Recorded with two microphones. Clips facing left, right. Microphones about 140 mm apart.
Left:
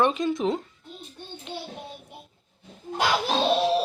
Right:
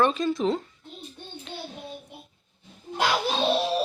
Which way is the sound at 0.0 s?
20° left (ahead or behind).